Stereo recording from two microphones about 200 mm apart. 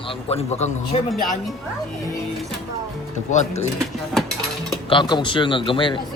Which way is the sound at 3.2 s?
35° left (ahead or behind).